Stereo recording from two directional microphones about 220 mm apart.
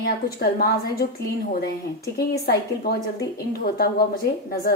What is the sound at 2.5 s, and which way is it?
A woman's voice, 45° left (ahead or behind).